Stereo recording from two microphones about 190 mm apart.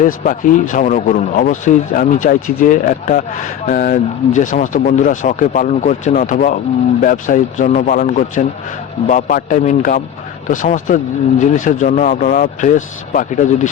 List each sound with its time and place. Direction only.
0.0 s a man's voice: 45° left (ahead or behind)